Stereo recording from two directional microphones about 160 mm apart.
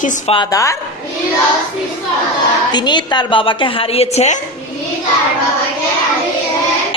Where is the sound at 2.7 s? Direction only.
25° left (ahead or behind); by 4.3 s 40° left (ahead or behind).